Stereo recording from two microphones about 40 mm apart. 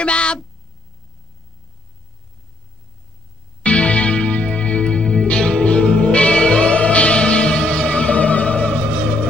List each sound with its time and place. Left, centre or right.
0.0 s speech: left
3.6 s music: left